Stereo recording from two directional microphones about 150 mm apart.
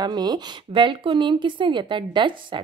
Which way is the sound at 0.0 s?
30° right (ahead or behind).